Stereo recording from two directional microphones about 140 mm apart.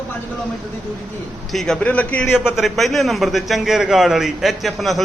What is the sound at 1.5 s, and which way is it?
Speech, 5° left (ahead or behind).